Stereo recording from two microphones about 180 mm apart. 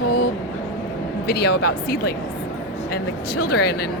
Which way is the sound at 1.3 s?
65° left (ahead or behind).